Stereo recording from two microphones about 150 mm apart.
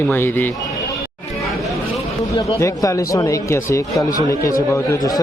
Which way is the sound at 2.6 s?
20° left (ahead or behind).